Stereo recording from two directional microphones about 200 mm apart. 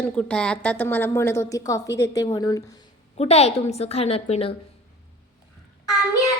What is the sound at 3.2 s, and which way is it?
A woman's voice, 30° left (ahead or behind).